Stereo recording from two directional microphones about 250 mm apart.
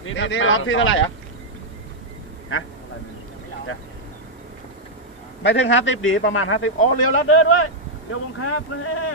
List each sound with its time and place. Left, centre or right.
0.0 s speech: left
5.4 s a man's voice: left